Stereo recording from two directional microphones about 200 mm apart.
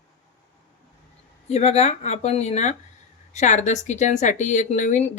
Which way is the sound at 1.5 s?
30° left (ahead or behind).